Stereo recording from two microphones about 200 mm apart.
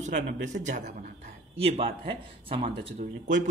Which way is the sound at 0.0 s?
40° right (ahead or behind).